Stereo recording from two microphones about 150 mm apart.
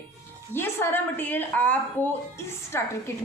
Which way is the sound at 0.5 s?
15° left (ahead or behind).